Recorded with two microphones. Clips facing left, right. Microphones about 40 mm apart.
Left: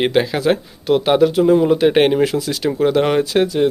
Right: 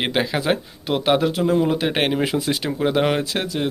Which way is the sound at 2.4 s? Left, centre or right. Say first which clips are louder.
Left 1 dB; right.